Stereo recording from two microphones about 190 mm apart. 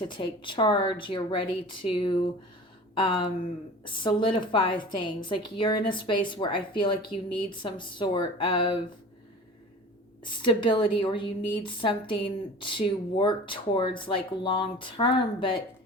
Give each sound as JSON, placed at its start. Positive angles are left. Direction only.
{"t": 0.0, "sound": "a woman's voice", "side_deg": 25}
{"t": 10.2, "sound": "a woman's voice", "side_deg": 25}